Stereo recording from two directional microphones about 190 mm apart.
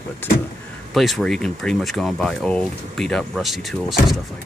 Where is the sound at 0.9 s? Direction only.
Centre (ahead or behind).